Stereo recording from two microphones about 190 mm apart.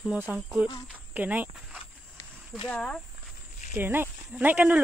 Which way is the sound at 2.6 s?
5° left (ahead or behind).